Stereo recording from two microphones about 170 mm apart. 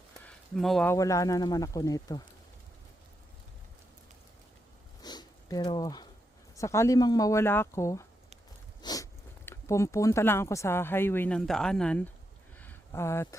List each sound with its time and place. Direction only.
0.5 s speech: centre (ahead or behind)
0.9 s speech: 20° left (ahead or behind)
5.0 s sniff: 25° left (ahead or behind)
6.6 s speech: 15° left (ahead or behind)
8.8 s a sound: 25° left (ahead or behind)
9.5 s speech: 15° left (ahead or behind)
12.5 s a sound: 15° left (ahead or behind)